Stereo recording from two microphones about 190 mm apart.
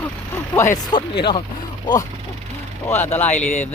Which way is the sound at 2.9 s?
10° left (ahead or behind).